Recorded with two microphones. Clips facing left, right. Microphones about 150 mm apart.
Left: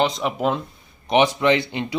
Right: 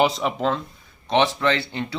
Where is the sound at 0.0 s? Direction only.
Centre (ahead or behind).